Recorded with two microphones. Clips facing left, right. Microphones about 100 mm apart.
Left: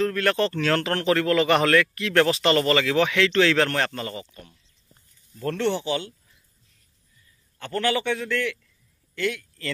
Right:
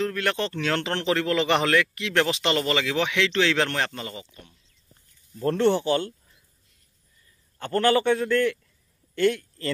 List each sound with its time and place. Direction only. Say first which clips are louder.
0.0 s speech: left 4 dB; 15° right (ahead or behind)
5.4 s a man's voice: right 4 dB; 35° right (ahead or behind)
7.5 s a man's voice: right 4 dB; 40° right (ahead or behind)